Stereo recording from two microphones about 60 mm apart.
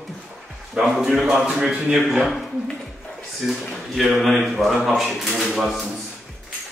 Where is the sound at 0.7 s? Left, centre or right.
Centre.